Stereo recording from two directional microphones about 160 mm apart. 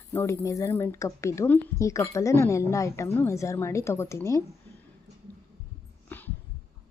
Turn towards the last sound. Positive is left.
turn(degrees=10)  # may be behind; listen again after turning